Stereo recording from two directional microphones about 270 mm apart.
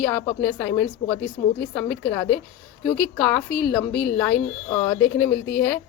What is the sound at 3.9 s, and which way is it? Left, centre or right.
Speech, left.